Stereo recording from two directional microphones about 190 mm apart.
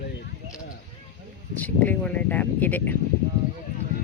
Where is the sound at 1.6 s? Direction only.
10° left (ahead or behind).